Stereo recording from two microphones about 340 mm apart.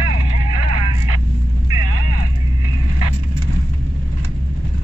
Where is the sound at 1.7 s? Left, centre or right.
Right.